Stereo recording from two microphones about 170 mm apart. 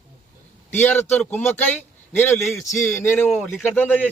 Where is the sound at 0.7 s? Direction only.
10° left (ahead or behind).